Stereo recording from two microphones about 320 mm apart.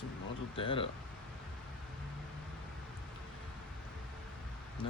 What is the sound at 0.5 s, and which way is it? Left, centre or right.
Speech, centre.